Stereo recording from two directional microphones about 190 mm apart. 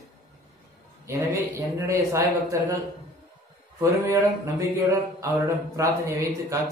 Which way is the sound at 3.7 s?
15° right (ahead or behind).